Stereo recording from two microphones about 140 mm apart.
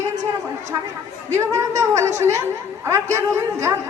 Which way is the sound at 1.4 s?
20° right (ahead or behind).